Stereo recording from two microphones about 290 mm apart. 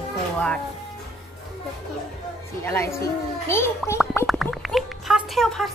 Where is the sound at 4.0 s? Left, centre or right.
Centre.